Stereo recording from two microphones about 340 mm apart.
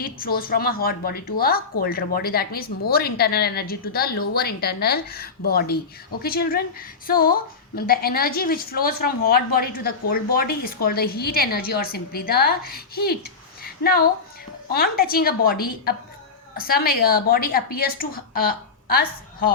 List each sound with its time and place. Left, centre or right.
0.0 s a woman's voice: left
13.6 s a sound: left
14.7 s a woman's voice: left